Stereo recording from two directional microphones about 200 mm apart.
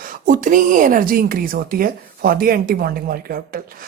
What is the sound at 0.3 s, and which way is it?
A woman's voice, 40° right (ahead or behind).